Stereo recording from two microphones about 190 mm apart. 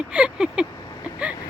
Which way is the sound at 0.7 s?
20° left (ahead or behind).